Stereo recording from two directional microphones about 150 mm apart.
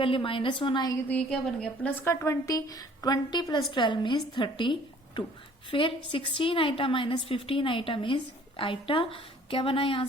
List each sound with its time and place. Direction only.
0.0 s a woman's voice: 35° left (ahead or behind)
1.0 s a woman's voice: 10° left (ahead or behind); by 10.1 s 35° left (ahead or behind)